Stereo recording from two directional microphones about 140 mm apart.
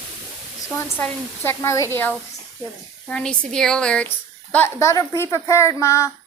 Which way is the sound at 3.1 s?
5° left (ahead or behind).